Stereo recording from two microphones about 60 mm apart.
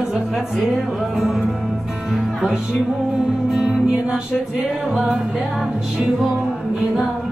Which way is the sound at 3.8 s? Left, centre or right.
Centre.